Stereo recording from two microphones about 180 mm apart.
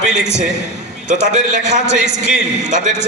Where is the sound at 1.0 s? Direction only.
40° right (ahead or behind).